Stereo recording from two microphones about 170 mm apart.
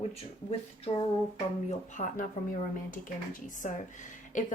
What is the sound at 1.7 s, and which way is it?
Speech, 45° left (ahead or behind).